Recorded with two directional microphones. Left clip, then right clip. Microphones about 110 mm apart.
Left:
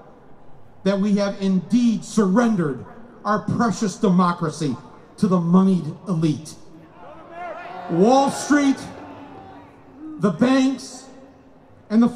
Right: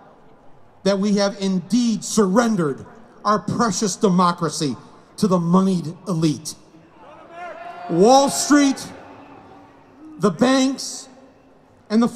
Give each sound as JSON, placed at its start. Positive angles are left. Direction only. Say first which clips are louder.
{"t": 0.8, "sound": "a man's voice", "louder": "right 2 dB", "side_deg": -40}
{"t": 7.9, "sound": "a man's voice", "louder": "right 3 dB", "side_deg": -40}
{"t": 10.1, "sound": "a man's voice", "louder": "right 2 dB", "side_deg": -40}